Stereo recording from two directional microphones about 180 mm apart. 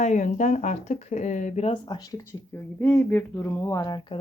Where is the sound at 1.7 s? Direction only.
25° left (ahead or behind).